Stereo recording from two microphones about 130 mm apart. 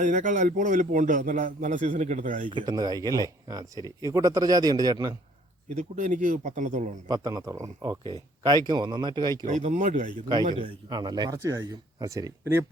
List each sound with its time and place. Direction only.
0.0 s a man's voice: 80° right
2.5 s speech: 35° right (ahead or behind)
5.7 s speech: 75° right (ahead or behind)
7.1 s speech: 30° right (ahead or behind)
9.5 s speech: 65° right (ahead or behind)
10.5 s speech: 35° right (ahead or behind); by 12.6 s 20° right (ahead or behind)